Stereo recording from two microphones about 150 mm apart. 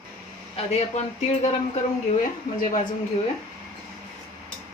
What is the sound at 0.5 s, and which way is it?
Speech, 45° left (ahead or behind).